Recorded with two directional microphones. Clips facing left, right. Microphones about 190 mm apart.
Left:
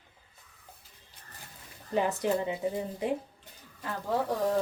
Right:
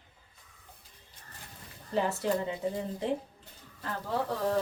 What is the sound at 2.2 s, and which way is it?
Speech, 20° left (ahead or behind).